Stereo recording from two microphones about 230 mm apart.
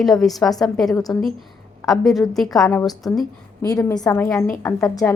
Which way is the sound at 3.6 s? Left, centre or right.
Centre.